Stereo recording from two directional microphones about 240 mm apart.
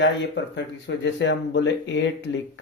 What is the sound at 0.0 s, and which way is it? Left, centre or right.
Speech, left.